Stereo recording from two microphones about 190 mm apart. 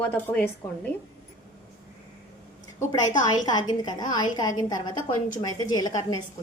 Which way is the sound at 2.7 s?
20° left (ahead or behind).